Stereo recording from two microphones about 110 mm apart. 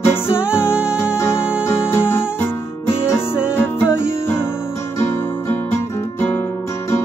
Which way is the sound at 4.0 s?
20° left (ahead or behind).